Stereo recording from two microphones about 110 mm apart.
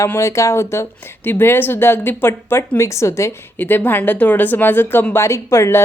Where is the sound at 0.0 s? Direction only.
25° left (ahead or behind).